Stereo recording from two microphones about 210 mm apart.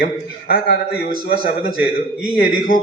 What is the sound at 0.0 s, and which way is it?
Speech, 45° left (ahead or behind).